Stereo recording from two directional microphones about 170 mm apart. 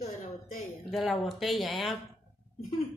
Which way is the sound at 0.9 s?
Centre (ahead or behind).